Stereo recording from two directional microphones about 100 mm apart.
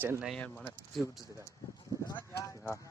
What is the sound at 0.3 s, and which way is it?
Speech, 15° left (ahead or behind).